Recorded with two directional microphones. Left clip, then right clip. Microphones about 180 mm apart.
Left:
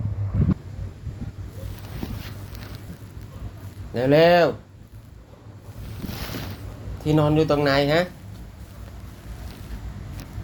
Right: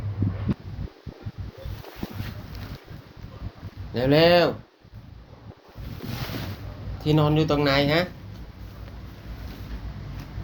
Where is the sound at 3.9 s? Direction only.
15° left (ahead or behind).